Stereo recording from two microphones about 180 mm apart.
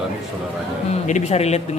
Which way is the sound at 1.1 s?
40° left (ahead or behind).